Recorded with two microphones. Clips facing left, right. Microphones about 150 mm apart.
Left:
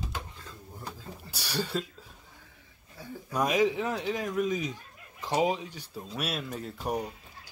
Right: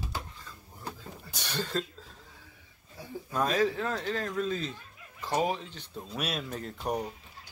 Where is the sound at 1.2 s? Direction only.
5° left (ahead or behind).